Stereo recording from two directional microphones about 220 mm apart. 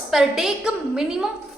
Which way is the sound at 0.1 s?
Centre (ahead or behind).